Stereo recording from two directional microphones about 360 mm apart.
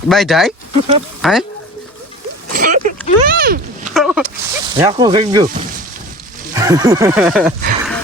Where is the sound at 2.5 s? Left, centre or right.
Right.